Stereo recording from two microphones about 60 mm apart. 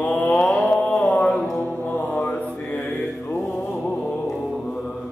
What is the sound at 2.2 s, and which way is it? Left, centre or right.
Mantra, left.